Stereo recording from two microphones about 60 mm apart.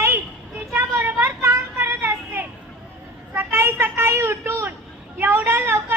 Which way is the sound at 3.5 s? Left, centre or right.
Right.